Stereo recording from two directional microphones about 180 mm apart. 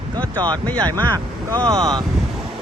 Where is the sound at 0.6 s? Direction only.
10° left (ahead or behind).